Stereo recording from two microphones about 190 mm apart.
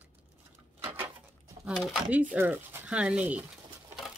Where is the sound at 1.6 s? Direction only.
Centre (ahead or behind).